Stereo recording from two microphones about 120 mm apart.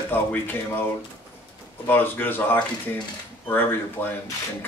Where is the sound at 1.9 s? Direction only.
15° left (ahead or behind).